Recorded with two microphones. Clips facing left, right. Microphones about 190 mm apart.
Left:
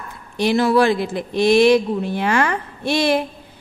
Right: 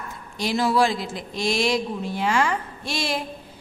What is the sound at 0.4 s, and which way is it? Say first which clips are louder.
A woman's voice: left 5 dB; 60° left (ahead or behind).